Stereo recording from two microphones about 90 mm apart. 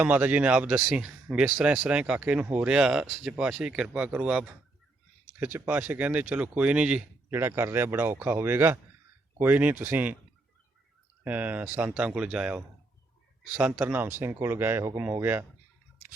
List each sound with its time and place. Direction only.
0.0 s speech: 20° right (ahead or behind)
7.3 s speech: 30° right (ahead or behind)
11.2 s speech: 20° right (ahead or behind)